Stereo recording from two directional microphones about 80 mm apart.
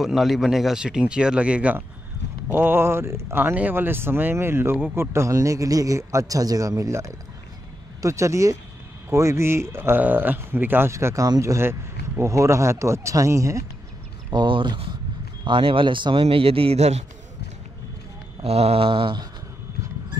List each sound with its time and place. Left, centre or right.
0.0 s speech: centre
2.5 s a man's voice: right
10.9 s speech: right
11.2 s a man's voice: right
12.2 s speech: right
14.3 s speech: right
15.4 s speech: right
18.8 s speech: right